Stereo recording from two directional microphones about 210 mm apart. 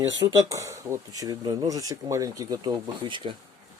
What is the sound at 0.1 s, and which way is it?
Speech, 65° right (ahead or behind).